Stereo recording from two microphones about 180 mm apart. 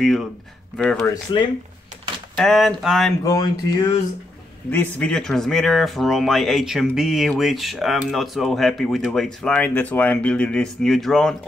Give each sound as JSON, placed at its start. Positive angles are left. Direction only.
{"t": 0.0, "sound": "speech", "side_deg": 0}
{"t": 1.0, "sound": "speech", "side_deg": 20}
{"t": 2.3, "sound": "speech", "side_deg": 0}
{"t": 3.3, "sound": "speech", "side_deg": 20}
{"t": 4.6, "sound": "speech", "side_deg": 10}